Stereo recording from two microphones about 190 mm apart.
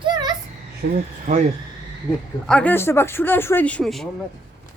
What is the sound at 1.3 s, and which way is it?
Speech, 40° right (ahead or behind).